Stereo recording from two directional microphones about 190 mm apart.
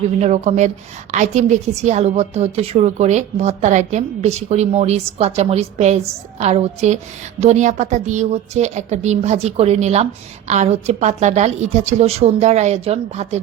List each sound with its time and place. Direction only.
0.2 s a woman's voice: 35° right (ahead or behind)